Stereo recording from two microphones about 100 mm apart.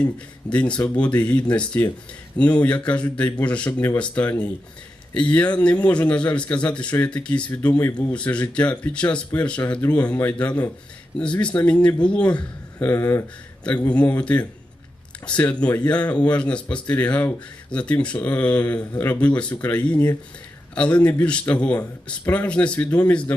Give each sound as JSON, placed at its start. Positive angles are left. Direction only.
{"t": 0.5, "sound": "speech", "side_deg": 10}
{"t": 3.7, "sound": "speech", "side_deg": 25}
{"t": 3.9, "sound": "speech", "side_deg": 10}
{"t": 13.0, "sound": "speech", "side_deg": 30}
{"t": 13.9, "sound": "speech", "side_deg": 10}